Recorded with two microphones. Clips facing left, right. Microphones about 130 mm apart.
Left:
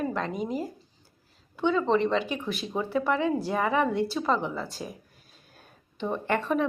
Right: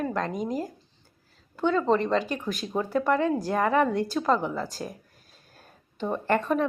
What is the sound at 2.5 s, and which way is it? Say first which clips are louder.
Speech: right 2 dB; 5° left (ahead or behind).